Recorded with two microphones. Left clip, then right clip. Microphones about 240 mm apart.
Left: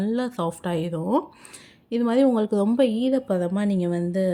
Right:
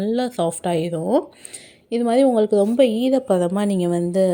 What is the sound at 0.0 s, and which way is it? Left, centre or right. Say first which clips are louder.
A woman's voice: right 5 dB; centre.